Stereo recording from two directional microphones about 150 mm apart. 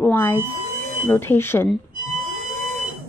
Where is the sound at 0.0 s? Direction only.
15° left (ahead or behind).